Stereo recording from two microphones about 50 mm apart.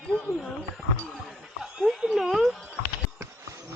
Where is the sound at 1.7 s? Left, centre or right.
Centre.